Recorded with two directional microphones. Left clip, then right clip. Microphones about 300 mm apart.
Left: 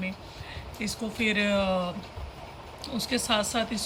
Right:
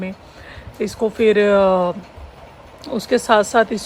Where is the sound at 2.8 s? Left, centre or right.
Centre.